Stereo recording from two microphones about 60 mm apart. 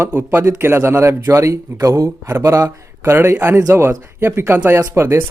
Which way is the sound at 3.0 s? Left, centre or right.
Right.